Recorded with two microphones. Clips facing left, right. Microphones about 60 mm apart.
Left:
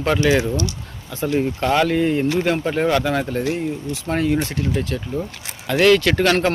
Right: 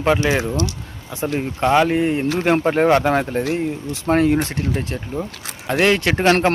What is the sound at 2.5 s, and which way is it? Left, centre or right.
Speech, right.